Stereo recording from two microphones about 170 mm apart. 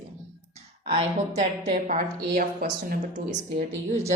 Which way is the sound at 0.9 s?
40° right (ahead or behind).